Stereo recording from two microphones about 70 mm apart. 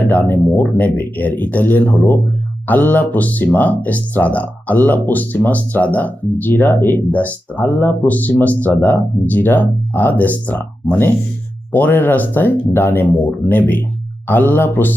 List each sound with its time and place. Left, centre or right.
0.0 s speech: left